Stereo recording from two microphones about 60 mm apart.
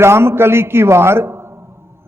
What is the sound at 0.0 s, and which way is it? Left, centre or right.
A man's voice, right.